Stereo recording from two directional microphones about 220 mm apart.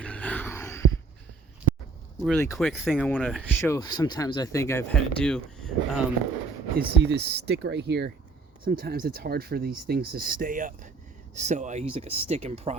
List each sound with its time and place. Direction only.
0.0 s a sound: 5° left (ahead or behind)
2.2 s speech: 10° left (ahead or behind)
6.7 s speech: 50° right (ahead or behind); by 12.7 s 30° right (ahead or behind)